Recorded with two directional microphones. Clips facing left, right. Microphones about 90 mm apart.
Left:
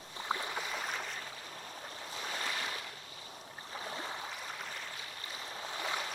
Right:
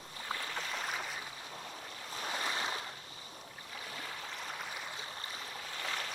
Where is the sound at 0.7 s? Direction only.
Centre (ahead or behind).